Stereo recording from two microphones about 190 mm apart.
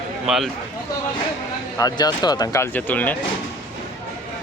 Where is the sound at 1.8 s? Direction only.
20° left (ahead or behind).